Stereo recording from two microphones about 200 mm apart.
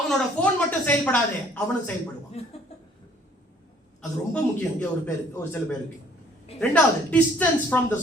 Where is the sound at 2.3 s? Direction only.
30° left (ahead or behind).